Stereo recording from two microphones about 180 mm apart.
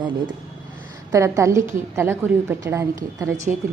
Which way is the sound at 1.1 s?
15° right (ahead or behind).